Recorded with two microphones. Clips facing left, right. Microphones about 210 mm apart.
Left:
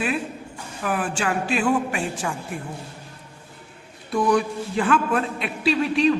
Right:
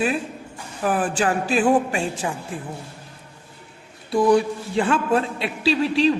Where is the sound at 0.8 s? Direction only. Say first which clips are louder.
Right 4 dB; 35° right (ahead or behind).